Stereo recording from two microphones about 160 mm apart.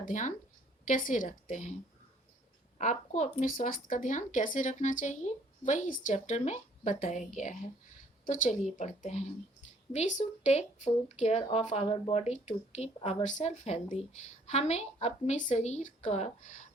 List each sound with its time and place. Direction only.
0.0 s speech: 50° left (ahead or behind)